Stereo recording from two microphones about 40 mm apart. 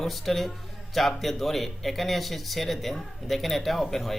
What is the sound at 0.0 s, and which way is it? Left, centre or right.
Speech, centre.